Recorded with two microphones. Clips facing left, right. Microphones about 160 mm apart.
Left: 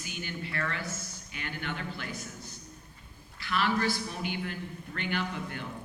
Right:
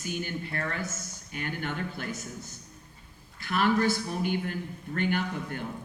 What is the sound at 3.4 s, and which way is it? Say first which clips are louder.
A man's voice: right 4 dB; 50° right (ahead or behind).